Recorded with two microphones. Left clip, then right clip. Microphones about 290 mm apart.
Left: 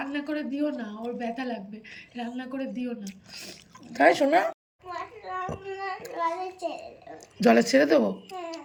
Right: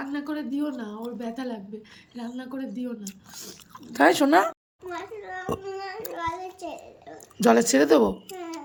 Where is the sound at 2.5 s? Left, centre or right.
Centre.